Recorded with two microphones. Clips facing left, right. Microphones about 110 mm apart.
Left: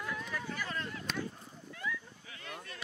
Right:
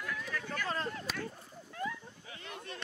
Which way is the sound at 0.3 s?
10° left (ahead or behind).